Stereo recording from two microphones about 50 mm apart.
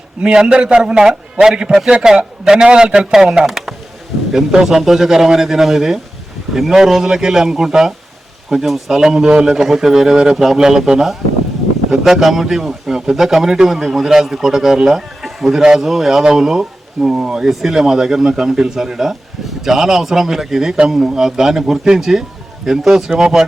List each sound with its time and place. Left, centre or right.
0.2 s a man's voice: centre
1.9 s a man's voice: right
3.4 s computer keyboard: centre
4.3 s a man's voice: centre